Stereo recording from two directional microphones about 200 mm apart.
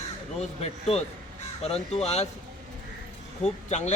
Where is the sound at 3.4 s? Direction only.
35° left (ahead or behind).